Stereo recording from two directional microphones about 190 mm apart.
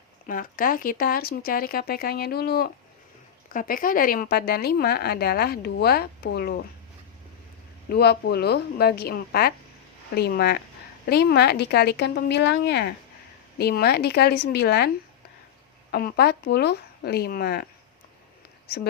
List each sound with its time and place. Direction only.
0.3 s speech: 45° left (ahead or behind)
7.9 s speech: 55° left (ahead or behind)